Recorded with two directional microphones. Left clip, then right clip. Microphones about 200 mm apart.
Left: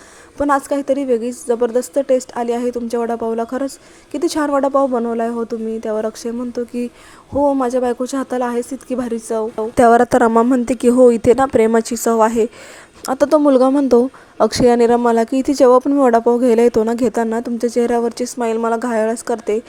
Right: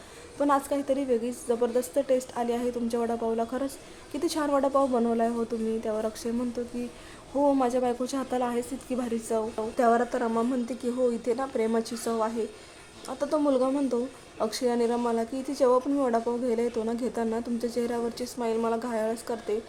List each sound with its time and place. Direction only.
0.3 s a woman's voice: 30° left (ahead or behind)
9.7 s speech: 50° left (ahead or behind)